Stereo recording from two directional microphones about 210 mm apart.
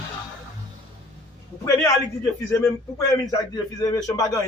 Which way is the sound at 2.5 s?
15° left (ahead or behind).